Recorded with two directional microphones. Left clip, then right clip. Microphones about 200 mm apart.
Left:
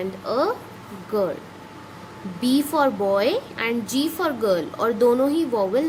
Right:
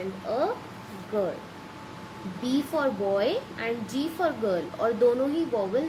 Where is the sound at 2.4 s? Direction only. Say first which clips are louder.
Left 7 dB; 40° left (ahead or behind).